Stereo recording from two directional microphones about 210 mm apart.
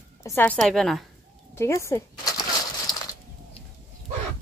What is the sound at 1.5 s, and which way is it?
Speech, 15° left (ahead or behind).